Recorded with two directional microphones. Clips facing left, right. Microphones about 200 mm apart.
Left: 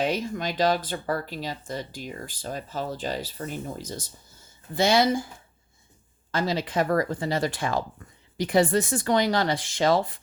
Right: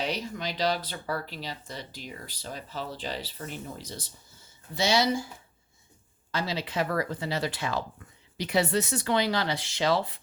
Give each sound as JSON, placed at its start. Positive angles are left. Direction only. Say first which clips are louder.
{"t": 0.0, "sound": "speech", "louder": "left 5 dB", "side_deg": 50}
{"t": 6.3, "sound": "speech", "louder": "left 5 dB", "side_deg": 50}